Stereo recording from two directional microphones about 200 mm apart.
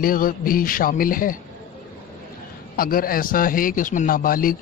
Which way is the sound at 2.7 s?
45° left (ahead or behind).